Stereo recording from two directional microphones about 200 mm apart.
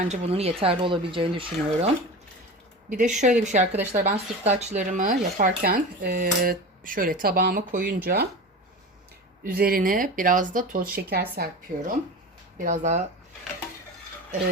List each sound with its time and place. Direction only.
0.0 s speech: 30° right (ahead or behind)
3.2 s speech: 40° right (ahead or behind)
9.4 s speech: 45° right (ahead or behind)